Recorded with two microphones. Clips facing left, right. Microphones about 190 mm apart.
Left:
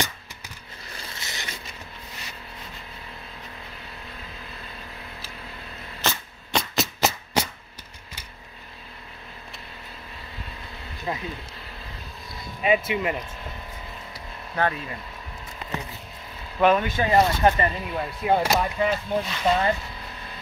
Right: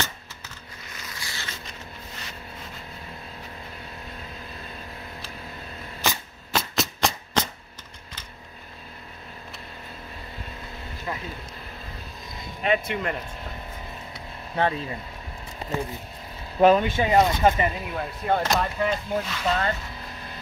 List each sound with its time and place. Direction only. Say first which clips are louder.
0.8 s zipper: left 1 dB; 30° left (ahead or behind)
5.9 s a sound: even; 10° right (ahead or behind)
6.7 s a sound: left 1 dB; 5° left (ahead or behind)
11.1 s a sound: left 3 dB; 20° left (ahead or behind)
12.6 s speech: left 2 dB; 5° left (ahead or behind)
14.5 s speech: right 1 dB; 25° right (ahead or behind)
16.5 s speech: right 3 dB; 30° right (ahead or behind)
17.0 s speech: left 3 dB; 15° right (ahead or behind)
18.2 s speech: left 2 dB; 10° left (ahead or behind)